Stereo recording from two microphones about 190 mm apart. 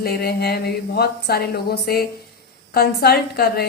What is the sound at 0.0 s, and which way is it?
A woman's voice, 55° left (ahead or behind).